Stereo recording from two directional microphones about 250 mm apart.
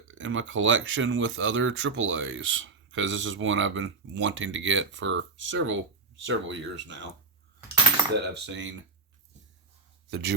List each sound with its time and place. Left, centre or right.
0.1 s speech: right
8.3 s speech: right
10.1 s speech: right